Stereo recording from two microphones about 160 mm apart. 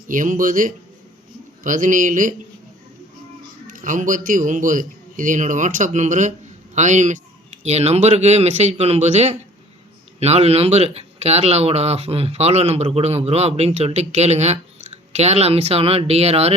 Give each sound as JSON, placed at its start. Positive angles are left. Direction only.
{"t": 0.1, "sound": "a man's voice", "side_deg": -55}
{"t": 3.7, "sound": "a man's voice", "side_deg": -55}